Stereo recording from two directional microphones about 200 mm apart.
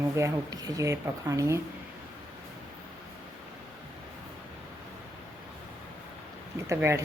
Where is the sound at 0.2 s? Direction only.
15° right (ahead or behind).